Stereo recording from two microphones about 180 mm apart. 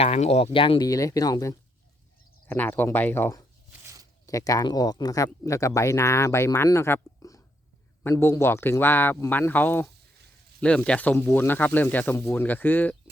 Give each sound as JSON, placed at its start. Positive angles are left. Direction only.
{"t": 0.0, "sound": "speech", "side_deg": 35}
{"t": 3.7, "sound": "a sound", "side_deg": -15}
{"t": 4.3, "sound": "speech", "side_deg": 20}